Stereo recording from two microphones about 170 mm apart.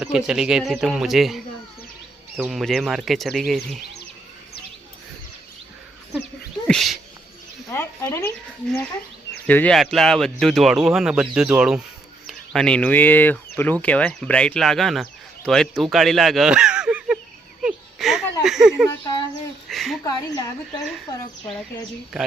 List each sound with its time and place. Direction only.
0.0 s speech: 5° right (ahead or behind)
2.4 s speech: centre (ahead or behind)
6.7 s speech: centre (ahead or behind)
7.7 s a sound: 15° left (ahead or behind)
8.6 s speech: 10° left (ahead or behind)
17.6 s a sound: 5° right (ahead or behind)
18.9 s speech: 25° left (ahead or behind)
19.6 s a sound: centre (ahead or behind)
20.1 s speech: 20° left (ahead or behind)